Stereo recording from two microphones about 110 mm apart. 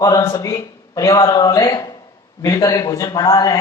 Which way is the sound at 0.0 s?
30° left (ahead or behind).